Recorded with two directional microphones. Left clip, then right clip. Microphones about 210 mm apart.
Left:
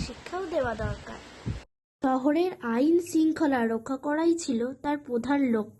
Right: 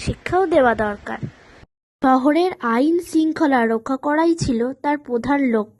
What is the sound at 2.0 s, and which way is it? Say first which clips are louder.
Speech: right 9 dB; 35° right (ahead or behind).